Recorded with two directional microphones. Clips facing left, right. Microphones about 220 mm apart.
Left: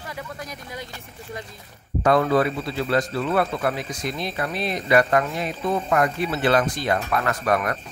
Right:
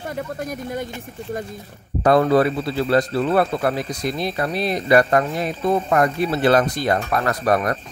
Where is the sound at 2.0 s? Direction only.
35° right (ahead or behind).